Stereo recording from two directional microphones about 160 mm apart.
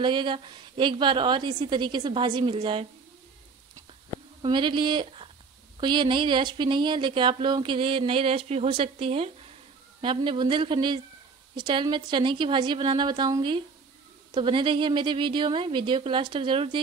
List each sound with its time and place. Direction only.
0.0 s a woman's voice: 30° right (ahead or behind)
4.4 s a woman's voice: 30° right (ahead or behind)